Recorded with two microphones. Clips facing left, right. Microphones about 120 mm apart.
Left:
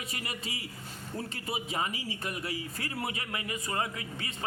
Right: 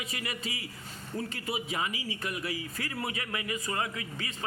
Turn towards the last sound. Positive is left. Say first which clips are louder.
# even
turn(degrees=30)  # may be behind; listen again after turning